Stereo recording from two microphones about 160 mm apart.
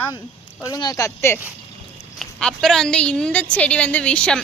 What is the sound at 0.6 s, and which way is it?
Speech, 25° left (ahead or behind).